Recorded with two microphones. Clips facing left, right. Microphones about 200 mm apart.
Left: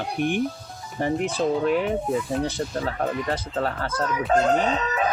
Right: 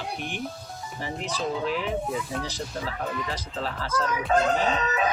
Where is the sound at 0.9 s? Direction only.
55° left (ahead or behind).